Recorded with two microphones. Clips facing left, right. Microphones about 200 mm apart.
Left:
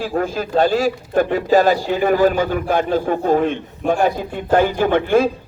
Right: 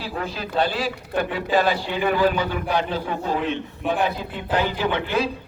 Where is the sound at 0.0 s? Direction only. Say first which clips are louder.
Left 8 dB; 45° left (ahead or behind).